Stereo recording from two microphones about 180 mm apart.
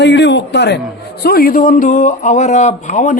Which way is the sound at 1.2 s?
55° left (ahead or behind).